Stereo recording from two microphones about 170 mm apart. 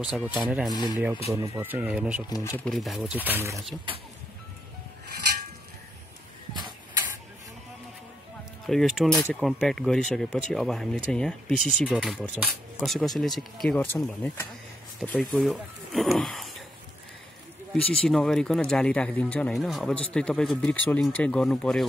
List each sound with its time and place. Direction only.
0.0 s speech: 5° right (ahead or behind)
1.3 s speech: 15° right (ahead or behind)
2.2 s speech: 20° left (ahead or behind)
2.6 s speech: centre (ahead or behind)
6.5 s a sound: 25° right (ahead or behind)
8.6 s speech: centre (ahead or behind)
17.7 s speech: 5° left (ahead or behind)